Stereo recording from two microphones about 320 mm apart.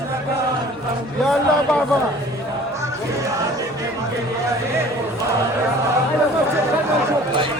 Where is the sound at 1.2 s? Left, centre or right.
Centre.